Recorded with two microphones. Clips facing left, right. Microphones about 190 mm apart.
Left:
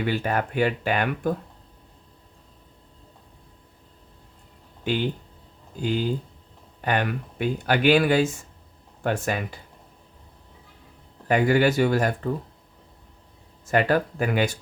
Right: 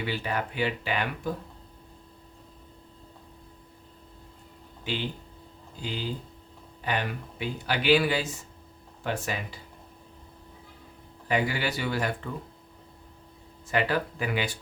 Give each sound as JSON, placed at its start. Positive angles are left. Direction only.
{"t": 0.0, "sound": "speech", "side_deg": 50}
{"t": 4.8, "sound": "speech", "side_deg": 50}
{"t": 11.3, "sound": "speech", "side_deg": 50}
{"t": 13.7, "sound": "speech", "side_deg": 45}